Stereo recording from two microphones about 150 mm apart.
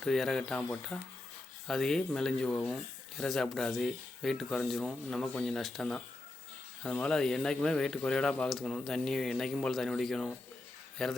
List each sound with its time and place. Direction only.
0.0 s speech: centre (ahead or behind)